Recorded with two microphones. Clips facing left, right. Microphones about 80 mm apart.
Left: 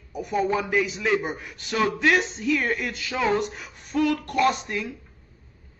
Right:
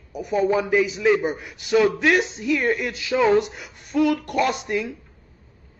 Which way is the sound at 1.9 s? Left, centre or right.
Centre.